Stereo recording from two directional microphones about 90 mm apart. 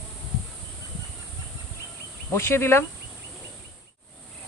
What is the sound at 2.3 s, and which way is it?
Speech, 30° left (ahead or behind).